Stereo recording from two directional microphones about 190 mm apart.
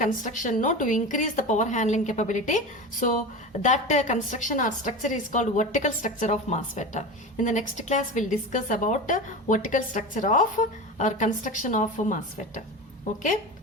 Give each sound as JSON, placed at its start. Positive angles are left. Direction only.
{"t": 0.0, "sound": "a woman's voice", "side_deg": 40}